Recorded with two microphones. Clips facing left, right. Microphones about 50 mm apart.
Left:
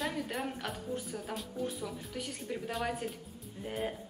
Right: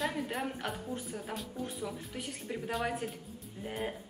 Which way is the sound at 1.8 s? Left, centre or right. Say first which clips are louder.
Even; centre.